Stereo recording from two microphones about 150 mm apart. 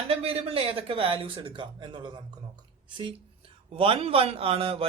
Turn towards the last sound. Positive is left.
turn(degrees=-40)  # may be behind; listen again after turning